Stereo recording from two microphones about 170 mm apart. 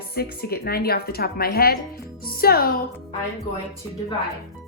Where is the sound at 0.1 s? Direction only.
65° left (ahead or behind).